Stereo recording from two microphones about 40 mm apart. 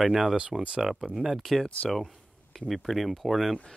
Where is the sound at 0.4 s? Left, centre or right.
Centre.